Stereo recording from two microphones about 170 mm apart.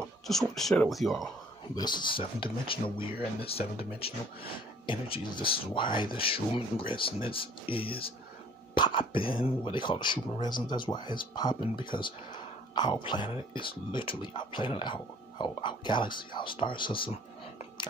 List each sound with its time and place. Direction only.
0.3 s speech: centre (ahead or behind)
1.8 s speech: 25° left (ahead or behind)